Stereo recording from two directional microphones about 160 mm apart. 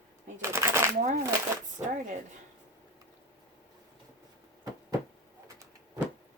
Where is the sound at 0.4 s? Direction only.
15° right (ahead or behind).